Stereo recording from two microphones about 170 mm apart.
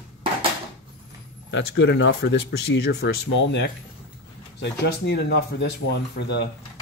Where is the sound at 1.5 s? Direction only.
90° left.